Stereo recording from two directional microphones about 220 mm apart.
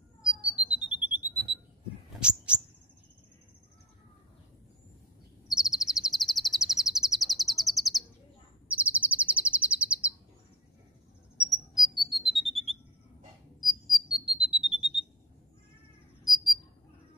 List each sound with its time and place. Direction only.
0.2 s squawk: 5° right (ahead or behind)
1.0 s alarm: 10° right (ahead or behind)
2.1 s owl: 5° right (ahead or behind)
5.5 s bird: centre (ahead or behind)
8.6 s chirp: 5° right (ahead or behind)
11.3 s a sound: centre (ahead or behind)
13.6 s cricket: centre (ahead or behind)
16.3 s cricket: centre (ahead or behind)